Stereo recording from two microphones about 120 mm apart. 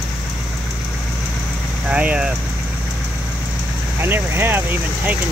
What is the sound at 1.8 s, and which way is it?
Speech, 10° right (ahead or behind).